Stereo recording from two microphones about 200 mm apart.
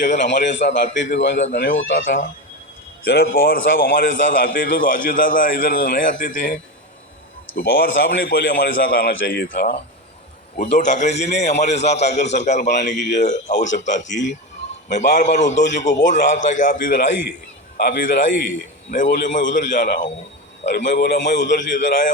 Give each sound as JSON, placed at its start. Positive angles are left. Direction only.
{"t": 0.2, "sound": "a man's voice", "side_deg": 60}
{"t": 2.0, "sound": "a man's voice", "side_deg": 45}
{"t": 10.8, "sound": "a man's voice", "side_deg": 35}
{"t": 12.9, "sound": "a man's voice", "side_deg": 60}
{"t": 13.1, "sound": "a man's voice", "side_deg": 40}
{"t": 14.8, "sound": "a man's voice", "side_deg": 35}
{"t": 17.7, "sound": "a man's voice", "side_deg": 55}
{"t": 19.1, "sound": "a man's voice", "side_deg": 40}
{"t": 20.7, "sound": "a man's voice", "side_deg": 60}